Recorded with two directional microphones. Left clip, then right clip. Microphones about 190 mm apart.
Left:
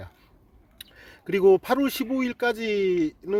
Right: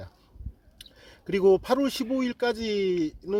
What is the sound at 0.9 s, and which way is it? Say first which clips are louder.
Speech: left 2 dB; 10° left (ahead or behind).